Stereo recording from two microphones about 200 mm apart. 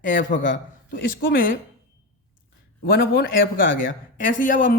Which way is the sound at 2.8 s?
45° left (ahead or behind).